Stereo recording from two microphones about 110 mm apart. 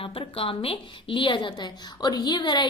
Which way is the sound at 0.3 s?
60° left (ahead or behind).